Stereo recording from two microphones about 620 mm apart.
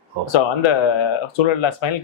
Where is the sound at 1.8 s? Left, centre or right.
Left.